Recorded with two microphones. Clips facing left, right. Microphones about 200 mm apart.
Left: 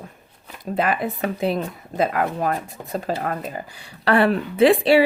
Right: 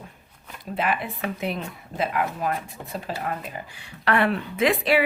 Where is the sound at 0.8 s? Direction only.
40° left (ahead or behind).